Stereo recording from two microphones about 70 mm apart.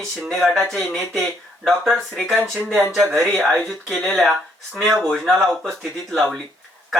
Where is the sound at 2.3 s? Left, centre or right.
Right.